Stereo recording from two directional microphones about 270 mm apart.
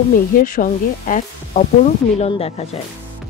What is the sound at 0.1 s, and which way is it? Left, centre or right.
Speech, left.